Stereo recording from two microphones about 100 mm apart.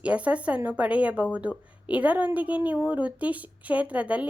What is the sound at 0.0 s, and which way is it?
A woman's voice, 15° right (ahead or behind).